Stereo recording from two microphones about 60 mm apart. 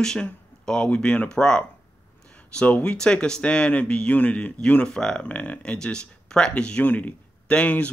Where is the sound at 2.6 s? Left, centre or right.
Centre.